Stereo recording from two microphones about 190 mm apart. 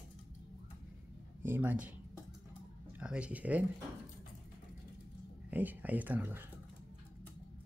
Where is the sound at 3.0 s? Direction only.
5° right (ahead or behind).